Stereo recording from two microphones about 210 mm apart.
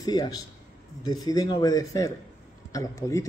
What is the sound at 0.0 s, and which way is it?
A man's voice, 20° left (ahead or behind).